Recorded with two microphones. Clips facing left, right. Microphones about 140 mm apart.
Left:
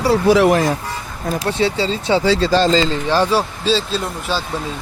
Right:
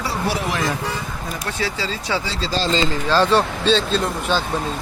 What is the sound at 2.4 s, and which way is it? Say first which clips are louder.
Speech: left 8 dB; 50° left (ahead or behind).